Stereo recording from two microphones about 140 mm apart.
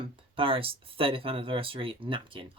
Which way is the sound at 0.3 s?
40° right (ahead or behind).